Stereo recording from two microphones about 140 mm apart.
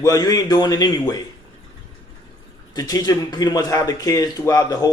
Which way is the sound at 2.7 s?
25° left (ahead or behind).